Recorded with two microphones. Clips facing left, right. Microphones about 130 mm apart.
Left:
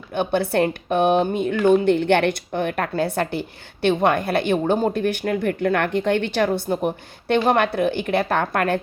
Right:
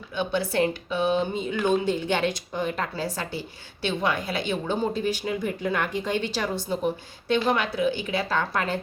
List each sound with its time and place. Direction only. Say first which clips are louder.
0.1 s speech: left 6 dB; 55° left (ahead or behind)